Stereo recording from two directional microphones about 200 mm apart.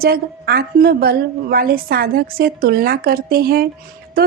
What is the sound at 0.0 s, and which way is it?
A woman's voice, 50° right (ahead or behind).